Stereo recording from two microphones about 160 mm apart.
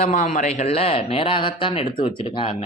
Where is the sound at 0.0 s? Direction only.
45° left (ahead or behind).